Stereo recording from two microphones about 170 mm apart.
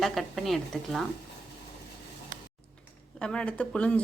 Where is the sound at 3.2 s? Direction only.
5° left (ahead or behind).